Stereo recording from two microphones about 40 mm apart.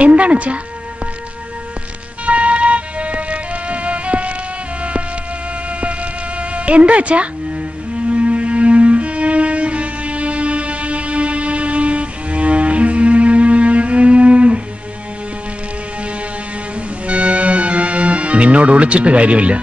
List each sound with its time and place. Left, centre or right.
0.0 s music: right
2.2 s music: right
6.5 s speech: right
7.9 s music: right
17.1 s music: right